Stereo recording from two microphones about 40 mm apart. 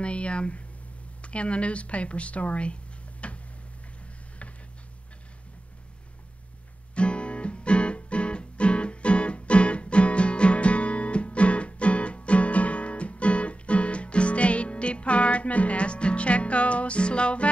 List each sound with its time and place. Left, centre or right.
0.0 s speech: left
7.0 s music: left